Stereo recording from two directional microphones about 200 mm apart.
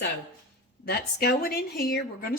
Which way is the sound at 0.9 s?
50° left (ahead or behind).